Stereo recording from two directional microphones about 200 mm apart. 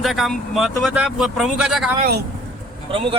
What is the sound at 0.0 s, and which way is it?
Speech, centre (ahead or behind).